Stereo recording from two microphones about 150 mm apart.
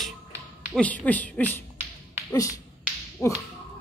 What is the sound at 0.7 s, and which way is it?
Music, 10° left (ahead or behind).